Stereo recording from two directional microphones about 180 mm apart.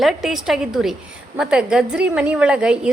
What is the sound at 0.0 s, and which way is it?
A woman's voice, centre (ahead or behind).